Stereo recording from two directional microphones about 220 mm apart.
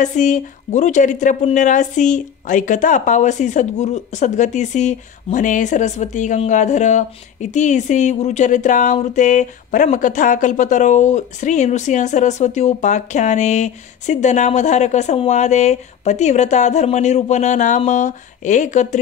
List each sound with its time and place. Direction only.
0.0 s speech: 35° left (ahead or behind)